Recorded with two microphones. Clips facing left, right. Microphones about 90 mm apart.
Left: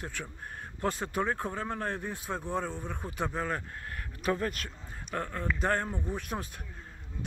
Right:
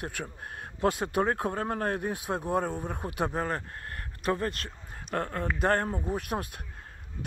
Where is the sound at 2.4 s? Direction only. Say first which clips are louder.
Right 5 dB; 50° right (ahead or behind).